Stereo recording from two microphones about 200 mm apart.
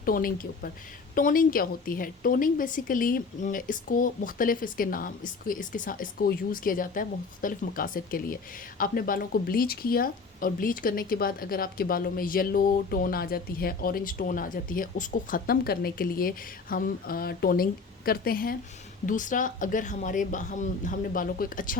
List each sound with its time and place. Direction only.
0.0 s speech: 45° left (ahead or behind)